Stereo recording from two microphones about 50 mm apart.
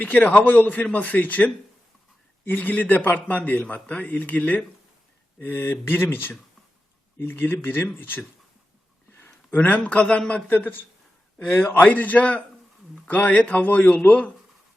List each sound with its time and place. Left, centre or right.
0.0 s a man's voice: left
5.4 s speech: left
9.6 s a man's voice: left
10.5 s speech: left
11.9 s a man's voice: left